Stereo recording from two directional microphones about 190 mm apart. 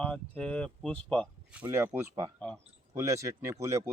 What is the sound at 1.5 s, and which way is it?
Speech, 10° right (ahead or behind).